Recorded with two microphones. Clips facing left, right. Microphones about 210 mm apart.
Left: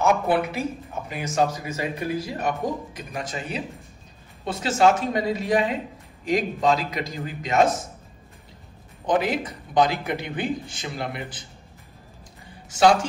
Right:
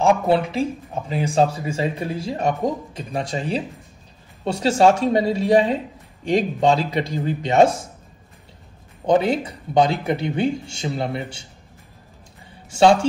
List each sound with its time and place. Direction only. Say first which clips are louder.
0.0 s speech: right 3 dB; 30° right (ahead or behind)
9.2 s speech: right 4 dB; 30° right (ahead or behind)
12.7 s speech: right 3 dB; 25° right (ahead or behind)